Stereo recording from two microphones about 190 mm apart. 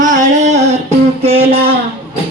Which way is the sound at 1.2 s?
30° right (ahead or behind).